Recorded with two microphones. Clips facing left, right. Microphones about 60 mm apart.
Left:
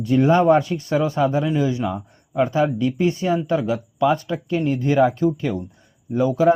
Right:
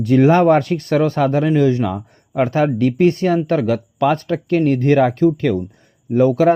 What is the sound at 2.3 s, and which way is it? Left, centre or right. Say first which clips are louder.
Speech: right 3 dB; right.